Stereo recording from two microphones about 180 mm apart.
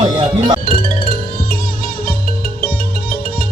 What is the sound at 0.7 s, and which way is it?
Music, 55° left (ahead or behind).